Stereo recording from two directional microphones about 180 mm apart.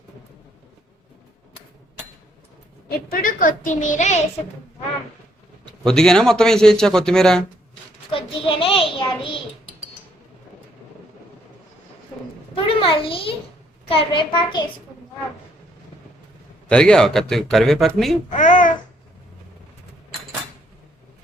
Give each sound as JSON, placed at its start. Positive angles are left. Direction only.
{"t": 3.1, "sound": "a woman's voice", "side_deg": 50}
{"t": 5.8, "sound": "speech", "side_deg": 5}
{"t": 8.1, "sound": "a child's voice", "side_deg": 30}
{"t": 12.5, "sound": "a child's voice", "side_deg": 30}
{"t": 16.6, "sound": "speech", "side_deg": 5}
{"t": 18.3, "sound": "babbling", "side_deg": 45}